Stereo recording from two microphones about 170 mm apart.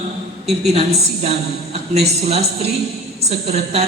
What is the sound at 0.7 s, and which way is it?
A woman's voice, 35° right (ahead or behind).